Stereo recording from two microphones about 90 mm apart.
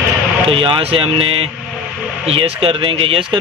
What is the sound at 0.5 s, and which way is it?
Speech, 80° right.